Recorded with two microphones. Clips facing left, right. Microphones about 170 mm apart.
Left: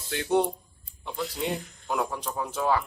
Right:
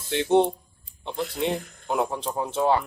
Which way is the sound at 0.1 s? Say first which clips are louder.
Right 5 dB; 25° right (ahead or behind).